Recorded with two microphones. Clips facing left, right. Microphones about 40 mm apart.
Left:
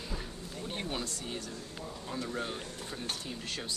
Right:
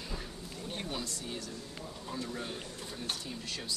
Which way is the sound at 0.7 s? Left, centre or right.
Left.